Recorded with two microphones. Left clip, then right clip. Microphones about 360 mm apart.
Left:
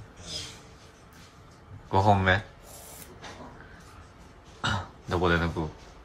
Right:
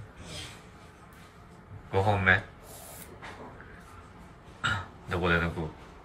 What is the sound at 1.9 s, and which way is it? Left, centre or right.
Speech, centre.